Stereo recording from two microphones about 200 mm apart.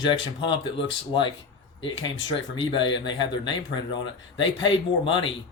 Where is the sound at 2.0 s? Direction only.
70° left (ahead or behind).